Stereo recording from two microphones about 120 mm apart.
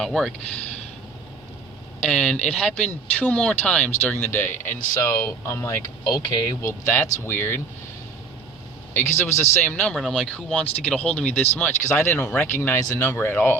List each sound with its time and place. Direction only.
0.0 s speech: 5° left (ahead or behind)
2.0 s speech: 10° left (ahead or behind); by 5.9 s 25° left (ahead or behind)
6.1 s speech: 35° left (ahead or behind)
8.9 s speech: 20° left (ahead or behind)